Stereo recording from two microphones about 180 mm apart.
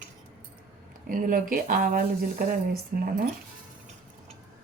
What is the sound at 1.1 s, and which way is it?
Speech, 50° right (ahead or behind).